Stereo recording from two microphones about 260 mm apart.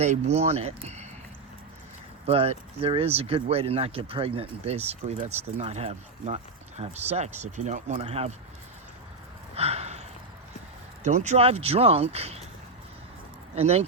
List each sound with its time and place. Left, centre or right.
0.0 s speech: right
2.2 s speech: right
9.6 s a sound: right
11.0 s speech: right
13.6 s speech: right